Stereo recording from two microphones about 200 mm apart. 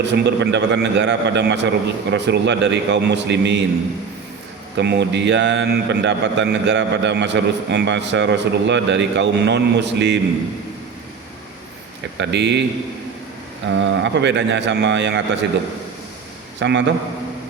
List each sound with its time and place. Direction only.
0.0 s a man's voice: 60° right (ahead or behind)
4.8 s a man's voice: 60° right (ahead or behind)
12.1 s a man's voice: 60° right (ahead or behind)
13.7 s a man's voice: 65° right (ahead or behind)
16.6 s a man's voice: 60° right (ahead or behind)